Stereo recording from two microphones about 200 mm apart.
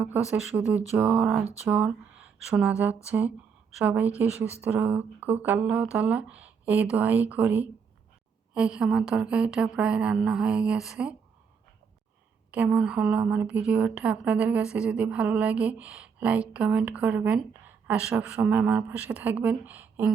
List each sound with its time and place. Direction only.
0.0 s a woman's voice: 5° right (ahead or behind)
12.5 s a woman's voice: 5° right (ahead or behind)